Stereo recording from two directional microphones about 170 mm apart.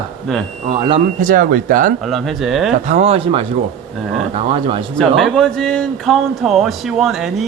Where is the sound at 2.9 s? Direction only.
40° right (ahead or behind).